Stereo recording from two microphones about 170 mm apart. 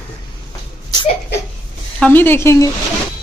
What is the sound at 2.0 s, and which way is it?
Speech, 10° left (ahead or behind).